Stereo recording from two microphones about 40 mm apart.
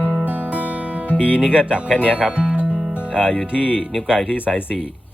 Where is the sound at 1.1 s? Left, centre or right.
Left.